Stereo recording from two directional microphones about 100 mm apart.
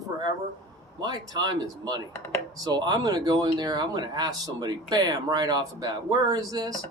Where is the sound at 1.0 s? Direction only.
40° right (ahead or behind).